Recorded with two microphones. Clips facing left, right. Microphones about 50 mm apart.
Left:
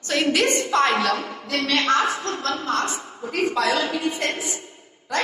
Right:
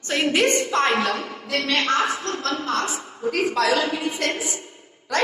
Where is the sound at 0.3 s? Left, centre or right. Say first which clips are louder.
Right 1 dB; right.